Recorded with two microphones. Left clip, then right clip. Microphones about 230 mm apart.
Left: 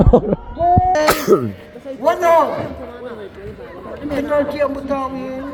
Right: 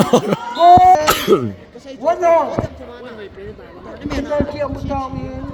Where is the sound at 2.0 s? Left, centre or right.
Left.